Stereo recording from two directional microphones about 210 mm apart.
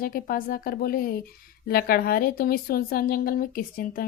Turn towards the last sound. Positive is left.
turn(degrees=40)  # may be behind; listen again after turning